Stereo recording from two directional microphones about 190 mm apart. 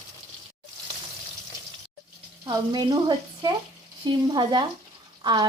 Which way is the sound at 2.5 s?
20° right (ahead or behind).